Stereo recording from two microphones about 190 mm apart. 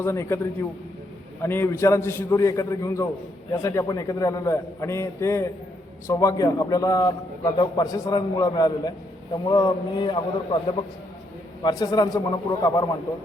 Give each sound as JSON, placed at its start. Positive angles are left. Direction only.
{"t": 0.0, "sound": "a man's voice", "side_deg": 15}
{"t": 1.4, "sound": "a man's voice", "side_deg": 10}
{"t": 11.6, "sound": "a man's voice", "side_deg": 20}